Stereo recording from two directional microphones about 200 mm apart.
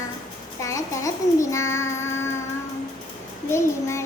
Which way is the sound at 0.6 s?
15° left (ahead or behind).